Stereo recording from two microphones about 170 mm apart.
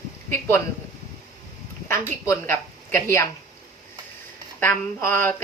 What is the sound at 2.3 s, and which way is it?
Speech, 15° left (ahead or behind).